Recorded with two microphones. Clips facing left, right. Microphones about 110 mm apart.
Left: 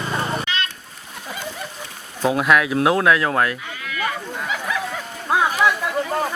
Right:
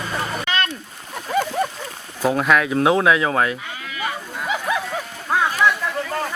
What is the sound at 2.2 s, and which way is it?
Speech, 5° left (ahead or behind).